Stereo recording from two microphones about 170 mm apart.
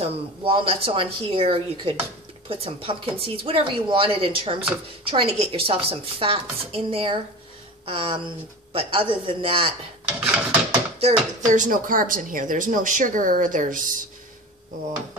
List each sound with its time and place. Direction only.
0.0 s a woman's voice: 30° right (ahead or behind)
10.0 s drawer open or close: 10° right (ahead or behind)
11.0 s speech: 45° right (ahead or behind)